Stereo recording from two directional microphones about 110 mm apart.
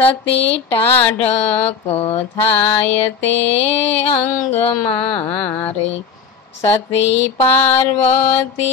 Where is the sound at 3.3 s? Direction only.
70° left (ahead or behind).